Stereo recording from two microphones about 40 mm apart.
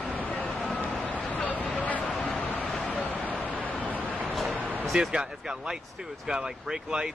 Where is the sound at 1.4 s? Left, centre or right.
Left.